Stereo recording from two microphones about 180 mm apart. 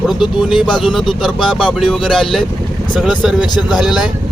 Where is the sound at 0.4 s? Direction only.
Centre (ahead or behind).